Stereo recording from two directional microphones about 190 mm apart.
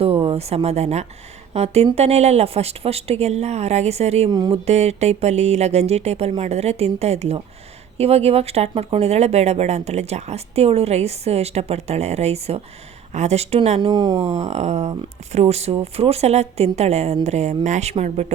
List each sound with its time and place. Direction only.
0.0 s speech: 30° right (ahead or behind)
4.3 s speech: 20° right (ahead or behind)
4.6 s speech: 35° right (ahead or behind)
14.2 s speech: 35° right (ahead or behind)